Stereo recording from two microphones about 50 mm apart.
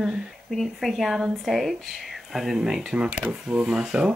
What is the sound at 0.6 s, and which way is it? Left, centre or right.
Speech, centre.